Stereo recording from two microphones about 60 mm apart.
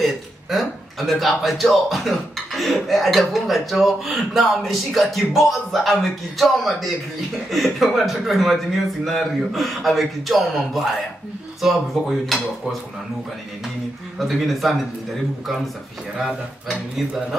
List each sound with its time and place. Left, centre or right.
0.0 s a man's voice: centre
14.1 s a man's voice: centre